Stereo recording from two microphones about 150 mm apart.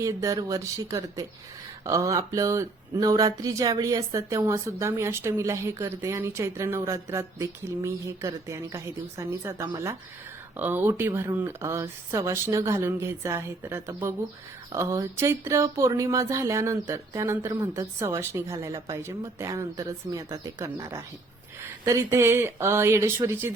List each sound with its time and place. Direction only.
0.0 s speech: 20° right (ahead or behind)